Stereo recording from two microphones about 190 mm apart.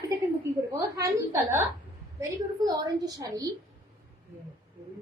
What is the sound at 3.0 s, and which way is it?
Speech, 20° right (ahead or behind).